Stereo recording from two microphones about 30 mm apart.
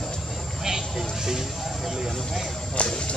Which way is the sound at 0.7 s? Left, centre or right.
Centre.